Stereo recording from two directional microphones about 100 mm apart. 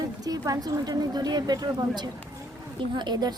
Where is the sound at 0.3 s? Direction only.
40° right (ahead or behind).